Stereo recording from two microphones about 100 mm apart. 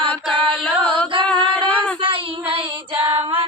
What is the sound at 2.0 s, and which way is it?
Child singing, 65° right (ahead or behind).